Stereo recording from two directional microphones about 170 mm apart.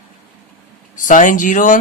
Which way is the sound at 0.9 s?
50° left (ahead or behind).